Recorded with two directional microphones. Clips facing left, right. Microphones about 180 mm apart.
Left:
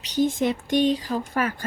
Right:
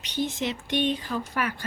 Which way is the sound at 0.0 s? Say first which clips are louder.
Left 7 dB; 40° left (ahead or behind).